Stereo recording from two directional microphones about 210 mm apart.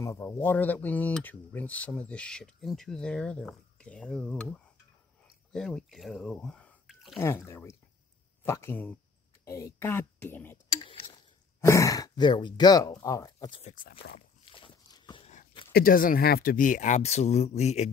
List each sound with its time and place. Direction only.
0.0 s speech: 15° left (ahead or behind)
7.2 s speech: 15° left (ahead or behind)
10.8 s a sound: 25° left (ahead or behind)
11.6 s speech: 15° left (ahead or behind)
13.6 s speech: 30° left (ahead or behind)
14.4 s a sound: 25° left (ahead or behind)
15.7 s speech: 40° left (ahead or behind)